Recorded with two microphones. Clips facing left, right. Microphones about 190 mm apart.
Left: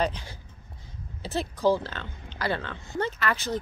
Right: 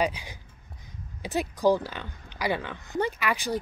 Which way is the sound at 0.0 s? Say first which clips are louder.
Even; 10° right (ahead or behind).